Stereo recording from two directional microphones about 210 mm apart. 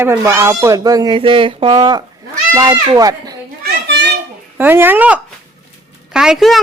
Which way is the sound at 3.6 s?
55° right (ahead or behind).